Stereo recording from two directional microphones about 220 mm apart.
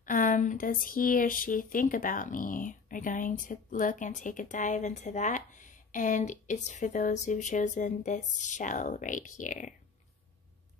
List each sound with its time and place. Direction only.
0.0 s speech: 35° left (ahead or behind)